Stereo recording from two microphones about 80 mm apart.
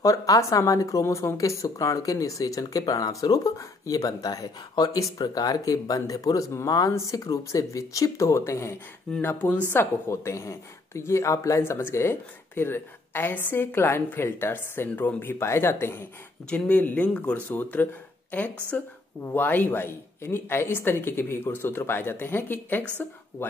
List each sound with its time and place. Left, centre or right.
0.0 s a woman's voice: left
9.2 s a woman's voice: left
16.4 s a woman's voice: centre